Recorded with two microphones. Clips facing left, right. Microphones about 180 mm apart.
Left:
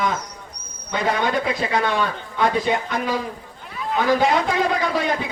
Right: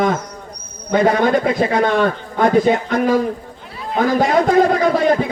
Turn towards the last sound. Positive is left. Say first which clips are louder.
# right 7 dB
turn(degrees=-50)  # may be behind; listen again after turning